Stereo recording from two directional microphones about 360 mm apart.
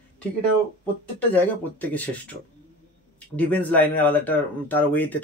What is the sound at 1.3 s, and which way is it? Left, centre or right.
Speech, centre.